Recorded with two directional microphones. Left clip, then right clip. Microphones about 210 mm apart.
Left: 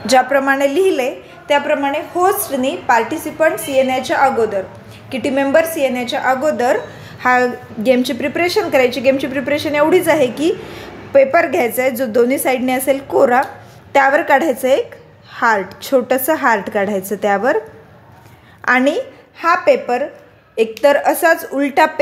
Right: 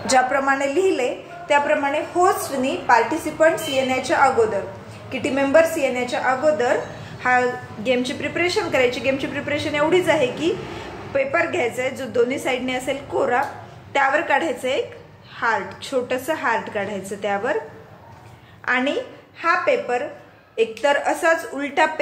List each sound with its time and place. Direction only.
0.0 s a woman's voice: 35° left (ahead or behind)
18.7 s a woman's voice: 45° left (ahead or behind)